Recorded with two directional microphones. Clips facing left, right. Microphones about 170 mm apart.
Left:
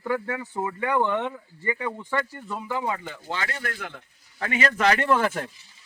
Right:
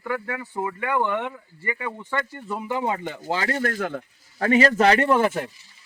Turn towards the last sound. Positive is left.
turn(degrees=-15)  # may be behind; listen again after turning